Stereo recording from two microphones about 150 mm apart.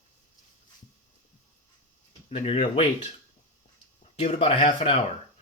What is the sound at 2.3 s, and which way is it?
Speech, 40° left (ahead or behind).